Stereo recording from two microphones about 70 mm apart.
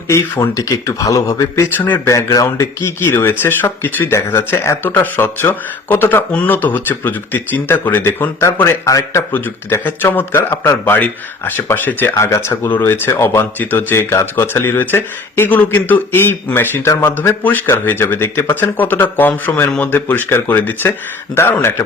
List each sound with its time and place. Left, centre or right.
0.1 s speech: left
1.7 s speech: left
2.0 s speech: left
2.8 s speech: left
4.8 s speech: left
8.6 s speech: left
9.3 s speech: left
12.1 s speech: left
17.1 s speech: left